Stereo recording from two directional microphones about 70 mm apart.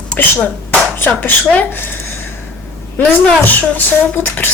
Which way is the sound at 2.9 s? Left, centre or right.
Left.